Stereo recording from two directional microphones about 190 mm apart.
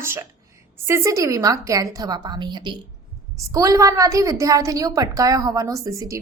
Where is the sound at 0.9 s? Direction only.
15° right (ahead or behind).